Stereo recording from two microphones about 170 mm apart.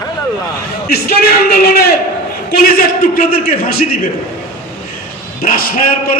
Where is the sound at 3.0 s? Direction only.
55° left (ahead or behind).